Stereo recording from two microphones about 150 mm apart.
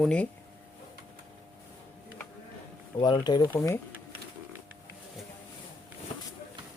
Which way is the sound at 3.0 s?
30° left (ahead or behind).